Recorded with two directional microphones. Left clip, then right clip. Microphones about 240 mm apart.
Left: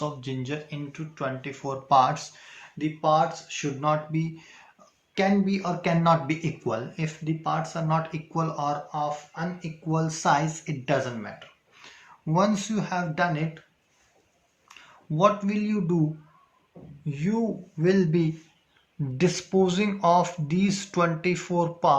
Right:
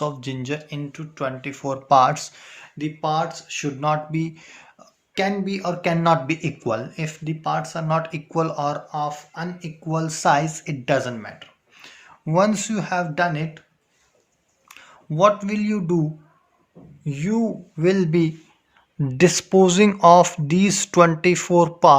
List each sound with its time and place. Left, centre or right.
0.0 s speech: right
14.7 s speech: right
17.1 s speech: right